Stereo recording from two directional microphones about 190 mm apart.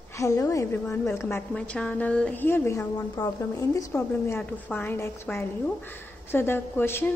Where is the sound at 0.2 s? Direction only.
15° left (ahead or behind).